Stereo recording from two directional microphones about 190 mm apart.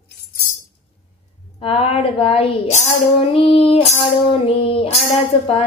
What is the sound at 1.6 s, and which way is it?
A woman's voice, 35° left (ahead or behind).